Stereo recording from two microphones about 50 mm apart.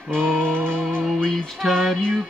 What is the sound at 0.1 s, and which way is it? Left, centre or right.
Music, centre.